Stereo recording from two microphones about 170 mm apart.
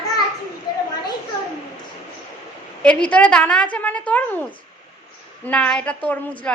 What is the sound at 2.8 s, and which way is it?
A woman's voice, 5° left (ahead or behind).